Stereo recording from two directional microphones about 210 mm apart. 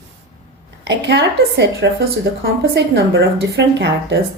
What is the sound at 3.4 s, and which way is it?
Speech, 55° right (ahead or behind).